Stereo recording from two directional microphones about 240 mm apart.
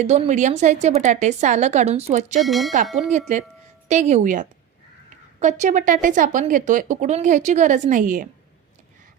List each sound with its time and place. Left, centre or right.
0.0 s a woman's voice: right
2.4 s speech: centre
3.1 s a woman's voice: right